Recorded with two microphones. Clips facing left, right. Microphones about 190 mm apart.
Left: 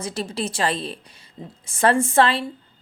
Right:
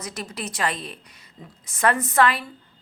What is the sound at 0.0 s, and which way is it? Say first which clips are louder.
A woman's voice: left 6 dB; 30° left (ahead or behind).